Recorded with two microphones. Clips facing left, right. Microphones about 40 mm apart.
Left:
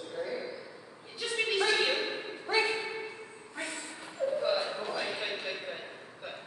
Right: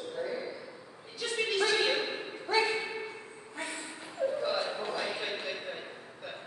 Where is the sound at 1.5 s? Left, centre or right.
Centre.